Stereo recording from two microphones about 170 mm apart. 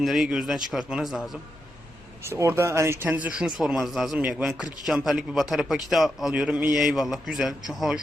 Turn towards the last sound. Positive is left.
turn(degrees=-5)  # may be behind; listen again after turning